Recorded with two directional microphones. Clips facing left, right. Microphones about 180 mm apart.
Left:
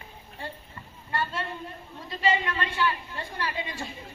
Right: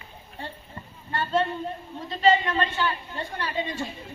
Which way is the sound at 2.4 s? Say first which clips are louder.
Right 2 dB; 25° right (ahead or behind).